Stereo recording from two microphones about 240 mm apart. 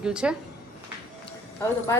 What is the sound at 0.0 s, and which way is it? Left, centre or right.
Speech, centre.